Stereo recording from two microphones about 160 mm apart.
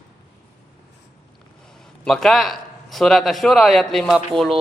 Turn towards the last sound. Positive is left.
turn(degrees=0)  # may be behind; listen again after turning